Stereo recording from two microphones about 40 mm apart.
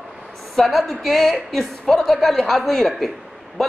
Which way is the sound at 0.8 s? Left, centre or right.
Centre.